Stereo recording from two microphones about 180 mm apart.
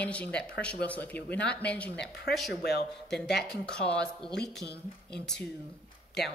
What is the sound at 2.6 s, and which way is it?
Speech, 65° left (ahead or behind).